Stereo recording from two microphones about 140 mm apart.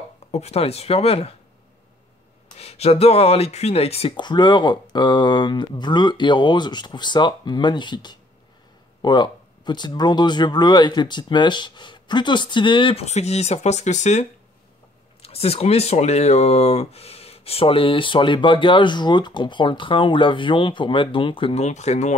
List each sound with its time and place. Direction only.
0.3 s speech: 50° left (ahead or behind)
2.6 s speech: 45° left (ahead or behind)
4.2 s speech: 30° left (ahead or behind)
13.0 s speech: 50° left (ahead or behind)
15.2 s speech: 45° left (ahead or behind)
21.6 s speech: 55° left (ahead or behind)